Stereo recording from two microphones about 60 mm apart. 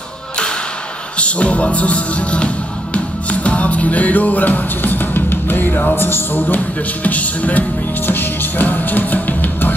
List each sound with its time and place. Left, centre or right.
1.1 s music: left